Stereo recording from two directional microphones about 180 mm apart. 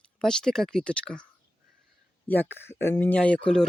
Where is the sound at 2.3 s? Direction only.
10° left (ahead or behind).